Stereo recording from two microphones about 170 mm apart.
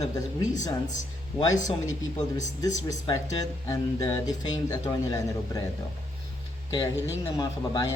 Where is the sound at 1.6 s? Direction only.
20° left (ahead or behind).